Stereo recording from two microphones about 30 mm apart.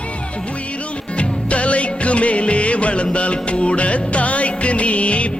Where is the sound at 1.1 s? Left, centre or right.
Left.